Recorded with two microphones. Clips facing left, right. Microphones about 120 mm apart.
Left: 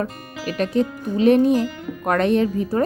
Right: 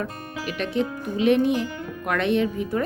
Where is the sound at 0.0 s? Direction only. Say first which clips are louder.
Left 3 dB; 40° left (ahead or behind).